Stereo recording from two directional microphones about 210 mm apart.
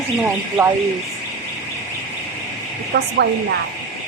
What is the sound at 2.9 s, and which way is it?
Speech, 50° right (ahead or behind).